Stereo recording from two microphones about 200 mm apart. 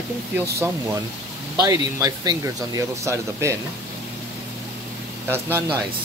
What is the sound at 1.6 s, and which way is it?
Speech, 20° right (ahead or behind).